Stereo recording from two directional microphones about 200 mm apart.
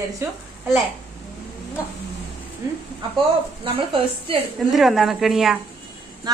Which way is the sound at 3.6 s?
30° right (ahead or behind).